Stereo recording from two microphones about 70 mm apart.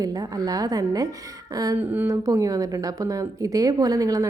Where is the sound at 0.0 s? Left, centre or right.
Right.